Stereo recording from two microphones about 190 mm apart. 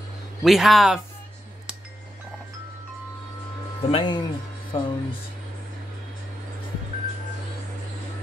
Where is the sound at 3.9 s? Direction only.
25° left (ahead or behind).